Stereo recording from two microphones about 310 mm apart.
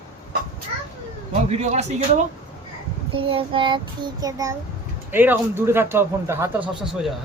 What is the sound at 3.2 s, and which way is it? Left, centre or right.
Speech, centre.